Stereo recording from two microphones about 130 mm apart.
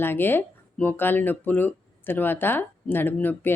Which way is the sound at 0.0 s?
15° left (ahead or behind).